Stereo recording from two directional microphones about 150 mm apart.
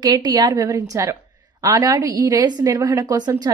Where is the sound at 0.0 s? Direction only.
30° right (ahead or behind).